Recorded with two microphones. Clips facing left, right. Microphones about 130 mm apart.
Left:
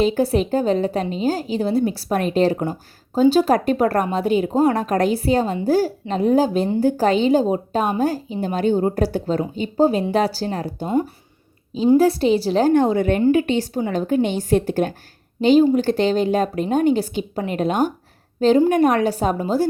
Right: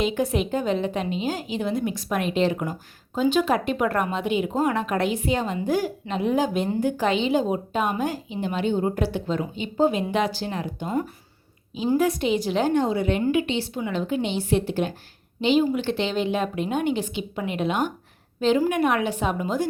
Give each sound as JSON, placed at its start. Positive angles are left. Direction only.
{"t": 0.0, "sound": "a woman's voice", "side_deg": 35}